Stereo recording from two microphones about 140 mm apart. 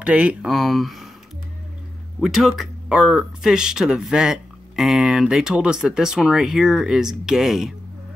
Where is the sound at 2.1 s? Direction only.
Centre (ahead or behind).